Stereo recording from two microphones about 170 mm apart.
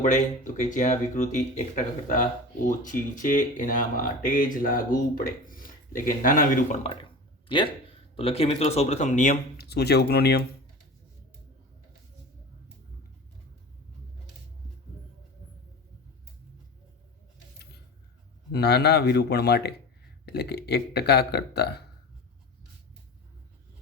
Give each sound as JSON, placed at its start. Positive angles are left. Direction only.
{"t": 0.0, "sound": "speech", "side_deg": 50}
{"t": 7.4, "sound": "a sound", "side_deg": 30}
{"t": 8.1, "sound": "speech", "side_deg": 35}
{"t": 9.6, "sound": "speech", "side_deg": 70}
{"t": 18.5, "sound": "speech", "side_deg": 75}